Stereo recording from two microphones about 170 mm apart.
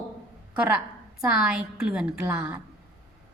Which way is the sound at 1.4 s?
5° right (ahead or behind).